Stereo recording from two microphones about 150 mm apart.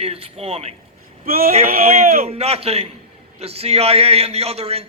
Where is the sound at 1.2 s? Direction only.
70° right (ahead or behind).